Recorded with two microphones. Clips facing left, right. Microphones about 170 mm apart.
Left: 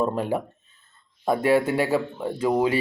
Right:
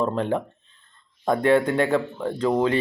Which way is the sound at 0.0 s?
10° left (ahead or behind).